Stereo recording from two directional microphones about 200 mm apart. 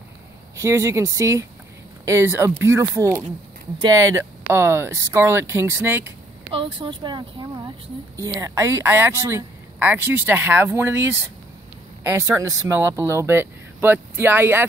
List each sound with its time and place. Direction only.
0.6 s speech: 15° right (ahead or behind)
6.5 s speech: 25° right (ahead or behind); by 14.7 s 10° right (ahead or behind)